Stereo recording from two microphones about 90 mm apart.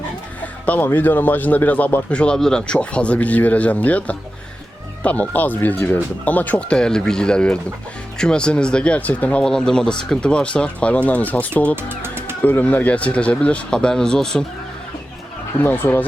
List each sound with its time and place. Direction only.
0.6 s speech: 20° left (ahead or behind)
11.8 s music: 25° right (ahead or behind)
12.4 s speech: 20° left (ahead or behind)
15.6 s speech: 25° left (ahead or behind)